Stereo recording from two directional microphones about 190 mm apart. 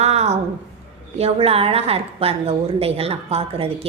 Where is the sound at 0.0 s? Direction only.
35° right (ahead or behind).